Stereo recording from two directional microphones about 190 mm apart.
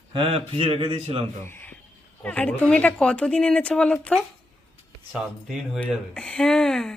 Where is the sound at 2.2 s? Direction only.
5° left (ahead or behind).